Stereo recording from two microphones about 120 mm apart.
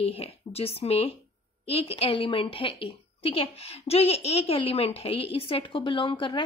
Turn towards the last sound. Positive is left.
turn(degrees=45)  # may be behind; listen again after turning